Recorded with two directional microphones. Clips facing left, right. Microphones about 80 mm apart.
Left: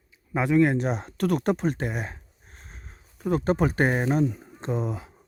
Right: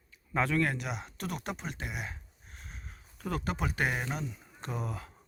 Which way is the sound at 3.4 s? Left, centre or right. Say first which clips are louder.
Left 9 dB; left.